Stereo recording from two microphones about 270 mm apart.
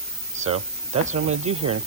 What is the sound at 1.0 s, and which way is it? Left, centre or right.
Speech, right.